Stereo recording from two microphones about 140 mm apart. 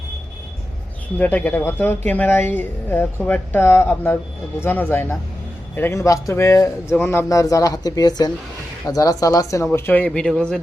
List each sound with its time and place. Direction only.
1.2 s speech: 10° left (ahead or behind)